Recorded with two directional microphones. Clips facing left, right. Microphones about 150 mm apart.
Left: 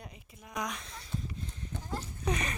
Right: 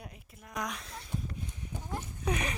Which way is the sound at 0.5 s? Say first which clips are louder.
Even; centre (ahead or behind).